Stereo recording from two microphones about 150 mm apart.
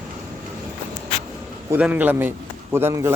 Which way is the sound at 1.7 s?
10° right (ahead or behind).